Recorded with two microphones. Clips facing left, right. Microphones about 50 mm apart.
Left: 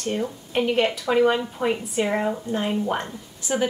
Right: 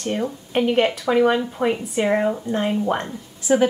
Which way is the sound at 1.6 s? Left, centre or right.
Right.